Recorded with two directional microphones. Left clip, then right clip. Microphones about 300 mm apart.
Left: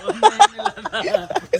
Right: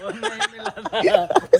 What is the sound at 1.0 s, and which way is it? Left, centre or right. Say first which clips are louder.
Speech: right 4 dB; right.